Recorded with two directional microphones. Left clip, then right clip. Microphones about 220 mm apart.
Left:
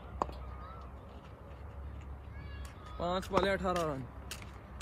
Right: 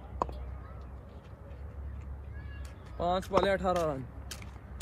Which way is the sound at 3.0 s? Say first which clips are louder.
Right 4 dB; centre (ahead or behind).